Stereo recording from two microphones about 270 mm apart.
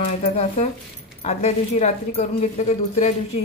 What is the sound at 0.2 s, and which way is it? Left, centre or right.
Speech, left.